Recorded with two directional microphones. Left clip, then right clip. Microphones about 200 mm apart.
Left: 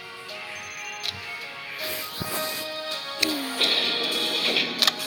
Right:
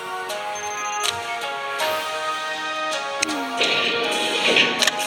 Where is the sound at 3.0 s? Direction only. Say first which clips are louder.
Right 3 dB; centre (ahead or behind).